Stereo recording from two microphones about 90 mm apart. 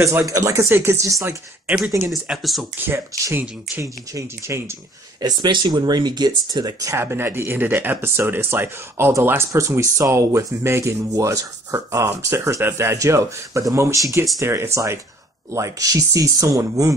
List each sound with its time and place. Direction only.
0.0 s speech: 35° right (ahead or behind)
2.2 s speech: centre (ahead or behind)
2.9 s speech: 25° right (ahead or behind)
3.8 s speech: 35° right (ahead or behind)
5.2 s speech: 55° right (ahead or behind)
7.0 s speech: 25° right (ahead or behind)